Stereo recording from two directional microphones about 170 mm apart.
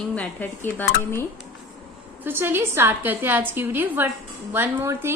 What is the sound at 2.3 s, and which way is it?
A woman's voice, 15° right (ahead or behind).